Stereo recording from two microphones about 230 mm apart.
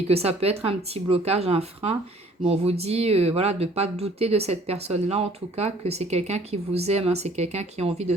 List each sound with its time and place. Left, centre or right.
0.1 s speech: right